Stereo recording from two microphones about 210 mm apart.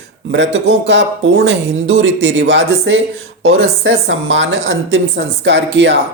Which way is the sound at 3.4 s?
75° right (ahead or behind).